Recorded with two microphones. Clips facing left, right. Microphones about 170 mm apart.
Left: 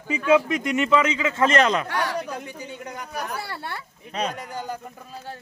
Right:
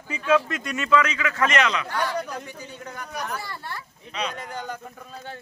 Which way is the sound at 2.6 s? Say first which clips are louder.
Left 2 dB; 15° left (ahead or behind).